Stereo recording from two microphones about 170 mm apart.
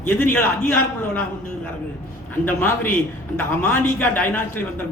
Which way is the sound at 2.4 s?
10° left (ahead or behind).